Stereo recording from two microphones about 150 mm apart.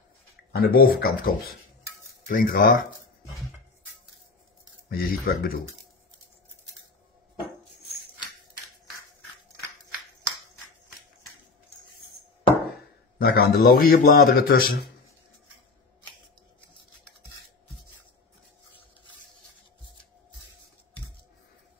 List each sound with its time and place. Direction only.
0.6 s speech: 90° left
2.2 s speech: 65° left (ahead or behind)
4.8 s a man's voice: 80° left
13.2 s a man's voice: 90° left